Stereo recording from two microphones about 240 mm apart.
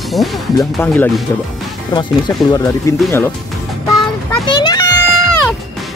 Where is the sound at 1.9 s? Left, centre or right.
Centre.